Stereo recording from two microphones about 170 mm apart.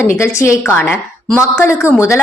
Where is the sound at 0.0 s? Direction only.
15° left (ahead or behind).